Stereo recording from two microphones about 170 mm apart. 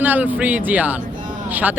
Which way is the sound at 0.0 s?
10° right (ahead or behind).